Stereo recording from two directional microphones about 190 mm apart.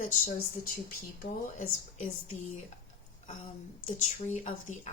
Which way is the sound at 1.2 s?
45° left (ahead or behind).